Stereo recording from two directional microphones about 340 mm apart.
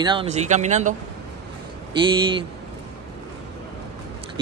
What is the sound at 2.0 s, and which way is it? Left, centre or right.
Speech, centre.